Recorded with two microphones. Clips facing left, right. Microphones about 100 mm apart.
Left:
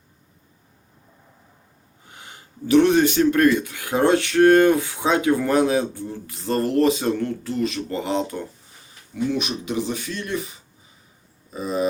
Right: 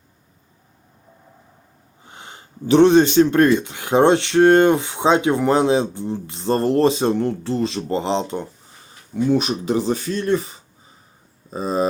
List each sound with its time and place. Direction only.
2.0 s speech: 25° right (ahead or behind)
9.3 s speech: 35° right (ahead or behind)